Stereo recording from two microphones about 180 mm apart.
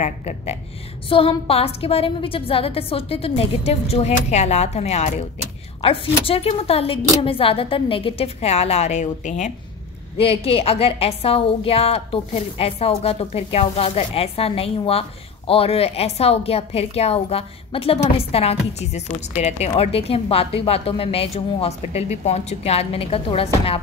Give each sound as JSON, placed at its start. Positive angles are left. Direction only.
{"t": 0.0, "sound": "a woman's voice", "side_deg": 40}